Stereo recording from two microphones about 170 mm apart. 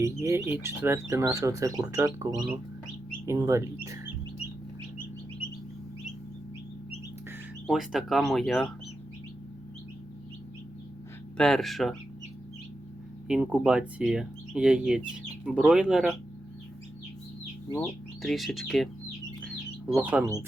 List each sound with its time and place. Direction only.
0.0 s speech: 15° right (ahead or behind)
7.7 s speech: centre (ahead or behind)
11.3 s speech: 5° left (ahead or behind)
13.2 s speech: 5° right (ahead or behind)
17.7 s speech: centre (ahead or behind)
19.9 s speech: 10° right (ahead or behind)